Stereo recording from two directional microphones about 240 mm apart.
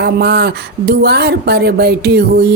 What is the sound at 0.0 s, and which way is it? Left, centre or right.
Speech, right.